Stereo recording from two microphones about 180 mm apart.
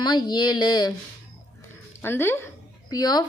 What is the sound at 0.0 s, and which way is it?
Speech, 25° left (ahead or behind).